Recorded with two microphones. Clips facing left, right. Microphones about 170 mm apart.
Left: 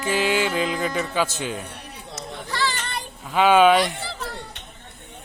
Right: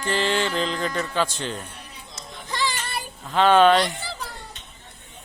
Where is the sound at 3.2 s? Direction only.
10° left (ahead or behind).